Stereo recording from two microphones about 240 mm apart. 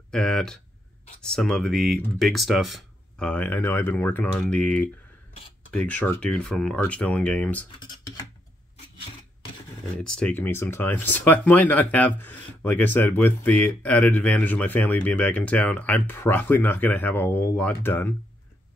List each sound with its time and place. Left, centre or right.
0.1 s speech: centre
7.8 s speech: centre
10.0 s speech: centre